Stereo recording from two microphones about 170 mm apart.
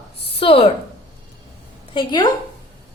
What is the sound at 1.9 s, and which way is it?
Speech, 25° left (ahead or behind).